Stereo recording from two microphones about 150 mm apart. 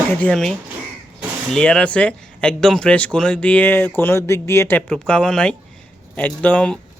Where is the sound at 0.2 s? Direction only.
5° left (ahead or behind).